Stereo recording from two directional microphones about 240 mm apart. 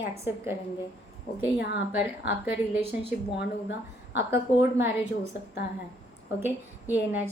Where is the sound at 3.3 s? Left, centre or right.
Left.